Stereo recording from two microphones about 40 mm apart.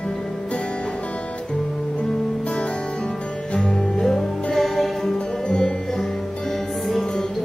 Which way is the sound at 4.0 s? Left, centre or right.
Centre.